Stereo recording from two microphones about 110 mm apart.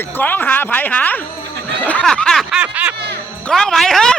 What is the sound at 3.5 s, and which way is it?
Snicker, 5° left (ahead or behind).